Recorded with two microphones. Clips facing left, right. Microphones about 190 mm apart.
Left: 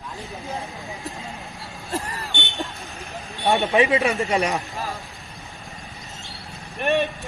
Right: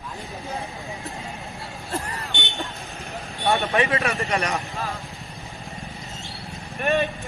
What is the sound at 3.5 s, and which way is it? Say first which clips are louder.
Speech: left 3 dB; 15° left (ahead or behind).